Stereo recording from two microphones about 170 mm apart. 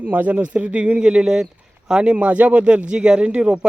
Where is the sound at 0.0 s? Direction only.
10° right (ahead or behind).